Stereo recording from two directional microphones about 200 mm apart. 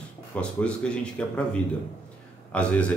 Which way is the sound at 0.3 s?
5° left (ahead or behind).